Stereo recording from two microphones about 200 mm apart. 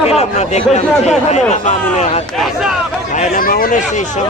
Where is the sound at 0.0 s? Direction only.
30° left (ahead or behind).